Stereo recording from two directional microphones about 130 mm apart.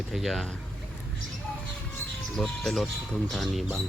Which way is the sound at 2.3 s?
5° left (ahead or behind).